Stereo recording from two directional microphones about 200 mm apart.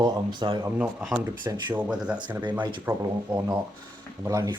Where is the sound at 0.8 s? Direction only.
Centre (ahead or behind).